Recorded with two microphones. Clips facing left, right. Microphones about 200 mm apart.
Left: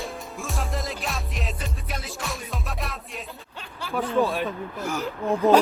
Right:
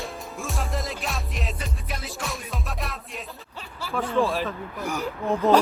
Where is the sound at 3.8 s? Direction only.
Centre (ahead or behind).